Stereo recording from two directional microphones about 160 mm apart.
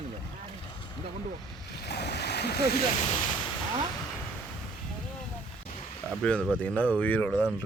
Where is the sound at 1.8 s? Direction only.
90° left.